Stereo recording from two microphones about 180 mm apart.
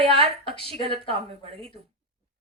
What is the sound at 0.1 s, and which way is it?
A woman's voice, 30° right (ahead or behind).